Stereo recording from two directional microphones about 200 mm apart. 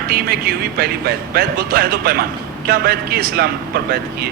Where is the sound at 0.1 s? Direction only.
50° right (ahead or behind).